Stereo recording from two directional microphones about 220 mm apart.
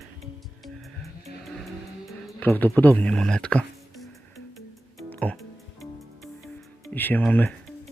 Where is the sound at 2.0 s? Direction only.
Centre (ahead or behind).